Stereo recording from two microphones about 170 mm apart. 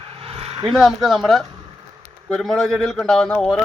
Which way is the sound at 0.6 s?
5° right (ahead or behind).